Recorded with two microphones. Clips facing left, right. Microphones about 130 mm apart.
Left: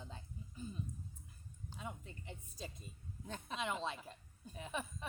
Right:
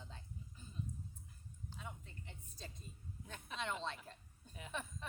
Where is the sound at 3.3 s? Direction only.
30° left (ahead or behind).